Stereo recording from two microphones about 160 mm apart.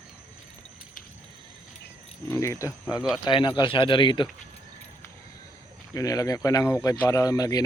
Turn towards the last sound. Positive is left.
turn(degrees=25)  # may be behind; listen again after turning